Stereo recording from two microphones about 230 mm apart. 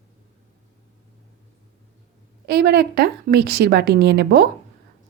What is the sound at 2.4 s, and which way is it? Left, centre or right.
Speech, right.